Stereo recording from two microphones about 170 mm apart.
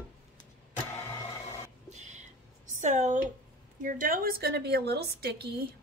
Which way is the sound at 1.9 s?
45° right (ahead or behind).